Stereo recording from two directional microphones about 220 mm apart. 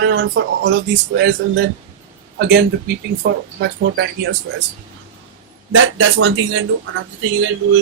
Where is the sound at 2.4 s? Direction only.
45° right (ahead or behind).